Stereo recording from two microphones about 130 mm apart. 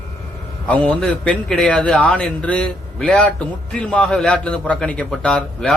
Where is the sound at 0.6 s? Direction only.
10° left (ahead or behind).